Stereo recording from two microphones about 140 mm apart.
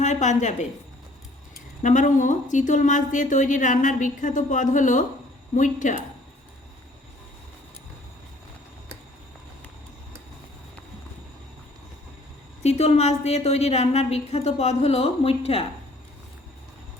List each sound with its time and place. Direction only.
0.0 s a woman's voice: 60° left (ahead or behind)
1.8 s a woman's voice: 65° left (ahead or behind)
12.6 s a woman's voice: 50° left (ahead or behind)